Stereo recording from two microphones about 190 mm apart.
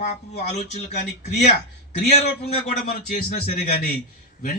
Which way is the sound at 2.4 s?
40° left (ahead or behind).